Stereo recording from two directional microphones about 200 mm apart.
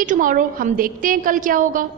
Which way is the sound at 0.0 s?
40° right (ahead or behind).